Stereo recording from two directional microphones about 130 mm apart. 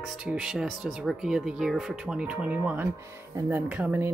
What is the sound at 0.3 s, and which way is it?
Speech, 5° right (ahead or behind).